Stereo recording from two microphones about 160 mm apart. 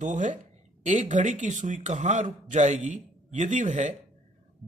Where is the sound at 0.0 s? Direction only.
50° right (ahead or behind).